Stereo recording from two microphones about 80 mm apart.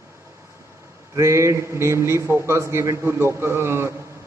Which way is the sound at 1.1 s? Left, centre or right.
Right.